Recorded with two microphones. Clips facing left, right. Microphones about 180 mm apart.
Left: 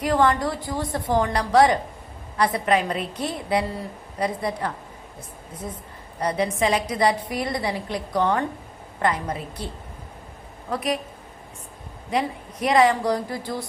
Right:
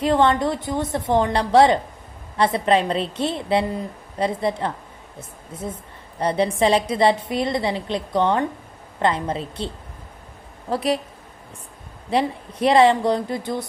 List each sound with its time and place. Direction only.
0.0 s a woman's voice: 25° right (ahead or behind)
6.1 s a woman's voice: 30° right (ahead or behind)
10.7 s speech: 30° right (ahead or behind)
12.1 s a woman's voice: 30° right (ahead or behind)